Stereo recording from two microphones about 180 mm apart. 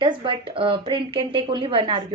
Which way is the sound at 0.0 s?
25° right (ahead or behind).